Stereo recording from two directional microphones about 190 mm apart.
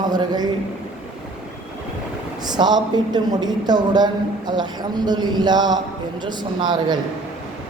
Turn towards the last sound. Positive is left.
turn(degrees=-25)  # may be behind; listen again after turning